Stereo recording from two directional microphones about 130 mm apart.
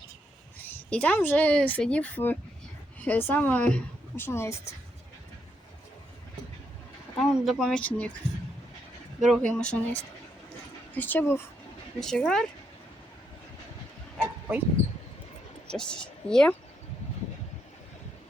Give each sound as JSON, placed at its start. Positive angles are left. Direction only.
{"t": 0.6, "sound": "speech", "side_deg": 10}
{"t": 7.2, "sound": "speech", "side_deg": 5}
{"t": 9.2, "sound": "speech", "side_deg": 0}
{"t": 11.9, "sound": "speech", "side_deg": 5}
{"t": 14.2, "sound": "a sound", "side_deg": -10}
{"t": 15.6, "sound": "speech", "side_deg": 5}